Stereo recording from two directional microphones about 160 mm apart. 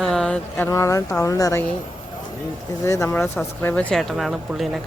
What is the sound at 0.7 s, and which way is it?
Speech, 20° left (ahead or behind).